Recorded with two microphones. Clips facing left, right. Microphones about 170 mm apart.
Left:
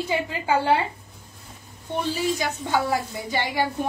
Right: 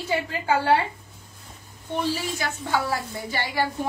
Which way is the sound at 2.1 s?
15° left (ahead or behind).